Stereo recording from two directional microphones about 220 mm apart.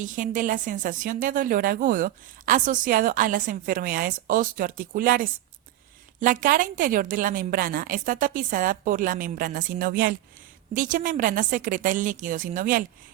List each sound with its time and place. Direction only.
0.0 s a woman's voice: 35° right (ahead or behind)